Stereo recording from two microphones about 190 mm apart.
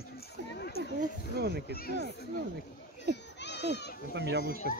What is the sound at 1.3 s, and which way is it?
Speech, 55° right (ahead or behind).